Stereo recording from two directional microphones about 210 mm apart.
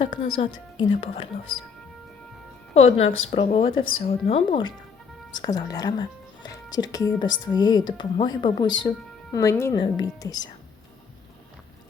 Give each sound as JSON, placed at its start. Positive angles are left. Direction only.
{"t": 0.0, "sound": "speech", "side_deg": 25}
{"t": 2.7, "sound": "a woman's voice", "side_deg": 30}